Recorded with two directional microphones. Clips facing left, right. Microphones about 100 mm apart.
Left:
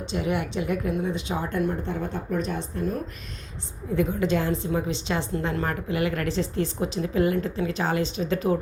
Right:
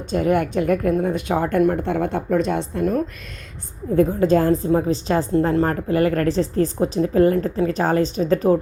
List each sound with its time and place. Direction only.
0.1 s speech: 45° right (ahead or behind); by 3.0 s 70° right (ahead or behind)
3.9 s a woman's voice: 40° right (ahead or behind)